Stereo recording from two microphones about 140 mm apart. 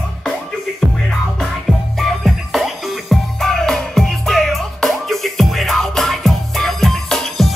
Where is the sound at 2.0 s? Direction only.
Centre (ahead or behind).